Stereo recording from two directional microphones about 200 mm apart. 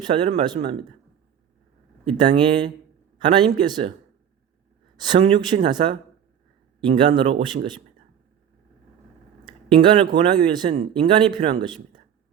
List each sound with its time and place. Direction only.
0.0 s speech: 25° right (ahead or behind)
2.0 s speech: 25° right (ahead or behind)
4.9 s speech: 20° right (ahead or behind)
9.4 s speech: 25° right (ahead or behind)